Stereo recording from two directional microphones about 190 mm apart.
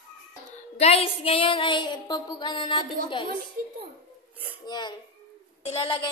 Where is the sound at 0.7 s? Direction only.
30° left (ahead or behind).